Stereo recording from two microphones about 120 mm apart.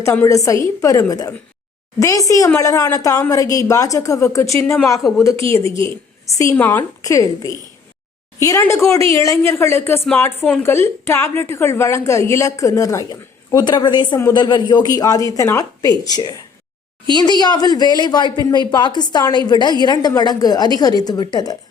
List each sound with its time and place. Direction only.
0.3 s a woman's voice: 25° left (ahead or behind)
6.6 s a woman's voice: 15° left (ahead or behind)
7.0 s a woman's voice: 30° left (ahead or behind)